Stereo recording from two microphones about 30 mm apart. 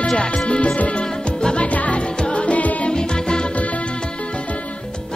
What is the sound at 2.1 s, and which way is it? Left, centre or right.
Music, left.